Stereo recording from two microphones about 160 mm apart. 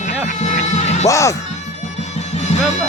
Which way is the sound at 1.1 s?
20° left (ahead or behind).